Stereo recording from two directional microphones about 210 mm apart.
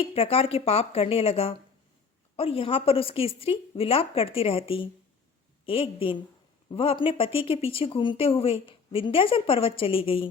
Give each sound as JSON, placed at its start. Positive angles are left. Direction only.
{"t": 0.0, "sound": "speech", "side_deg": 30}